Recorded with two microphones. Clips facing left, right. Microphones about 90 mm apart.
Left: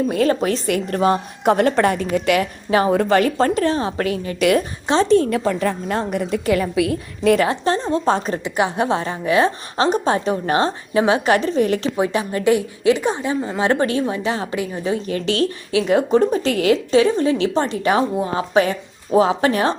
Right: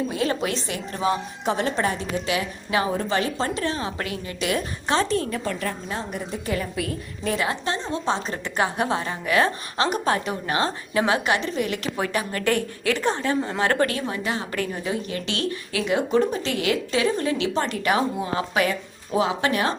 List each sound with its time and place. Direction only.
0.1 s speech: 45° left (ahead or behind)
0.7 s a woman's voice: 55° left (ahead or behind)
2.6 s a woman's voice: 35° left (ahead or behind)
3.1 s a woman's voice: 55° left (ahead or behind); by 4.4 s 35° left (ahead or behind)
4.4 s speech: 55° left (ahead or behind)
4.9 s a woman's voice: 20° left (ahead or behind)
5.9 s a woman's voice: 75° left (ahead or behind)
7.4 s a woman's voice: 35° left (ahead or behind)
8.4 s a woman's voice: 15° left (ahead or behind)
8.7 s a woman's voice: 25° left (ahead or behind)
11.3 s a woman's voice: 40° left (ahead or behind)
11.9 s a woman's voice: 20° left (ahead or behind)